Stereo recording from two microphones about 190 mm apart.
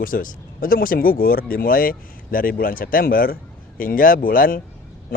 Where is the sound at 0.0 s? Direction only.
45° left (ahead or behind).